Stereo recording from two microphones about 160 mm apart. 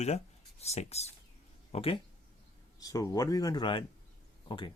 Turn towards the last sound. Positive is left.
turn(degrees=30)  # may be behind; listen again after turning